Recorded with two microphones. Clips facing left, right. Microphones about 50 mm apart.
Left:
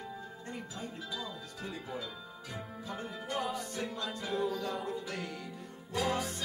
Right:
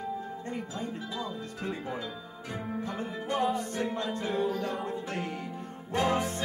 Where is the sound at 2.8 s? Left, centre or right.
Right.